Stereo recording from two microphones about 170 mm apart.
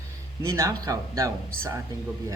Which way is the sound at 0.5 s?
20° right (ahead or behind).